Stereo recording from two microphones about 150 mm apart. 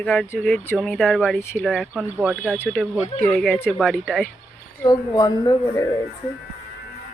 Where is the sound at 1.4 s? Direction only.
15° left (ahead or behind).